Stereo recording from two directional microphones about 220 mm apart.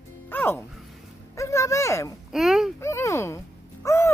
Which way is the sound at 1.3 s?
15° left (ahead or behind).